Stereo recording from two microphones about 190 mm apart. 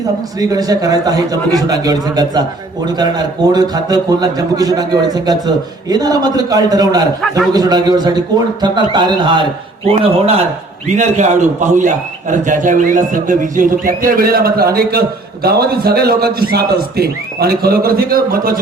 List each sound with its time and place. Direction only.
0.3 s a man's voice: 20° right (ahead or behind); by 18.6 s 50° right (ahead or behind)